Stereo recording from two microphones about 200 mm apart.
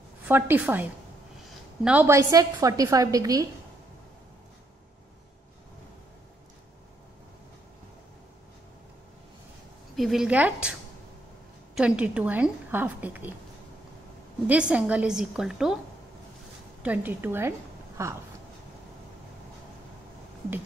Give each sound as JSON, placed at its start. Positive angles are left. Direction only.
{"t": 0.3, "sound": "a woman's voice", "side_deg": -10}
{"t": 9.9, "sound": "a woman's voice", "side_deg": 0}
{"t": 14.5, "sound": "a woman's voice", "side_deg": -5}
{"t": 16.8, "sound": "a woman's voice", "side_deg": -10}